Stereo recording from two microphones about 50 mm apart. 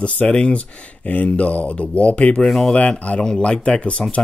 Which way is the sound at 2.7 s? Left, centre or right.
Left.